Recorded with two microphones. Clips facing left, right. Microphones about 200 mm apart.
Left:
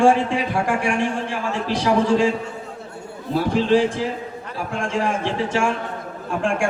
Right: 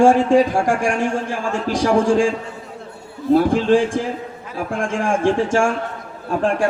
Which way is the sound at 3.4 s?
50° right (ahead or behind).